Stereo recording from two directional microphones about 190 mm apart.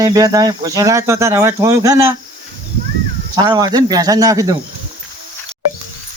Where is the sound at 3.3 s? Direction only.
20° right (ahead or behind).